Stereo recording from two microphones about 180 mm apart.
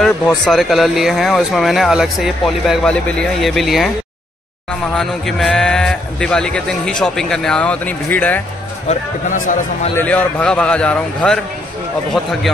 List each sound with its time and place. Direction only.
0.5 s a man's voice: centre (ahead or behind)
4.9 s a man's voice: centre (ahead or behind)
8.8 s speech: 45° left (ahead or behind)
9.9 s a man's voice: 10° left (ahead or behind)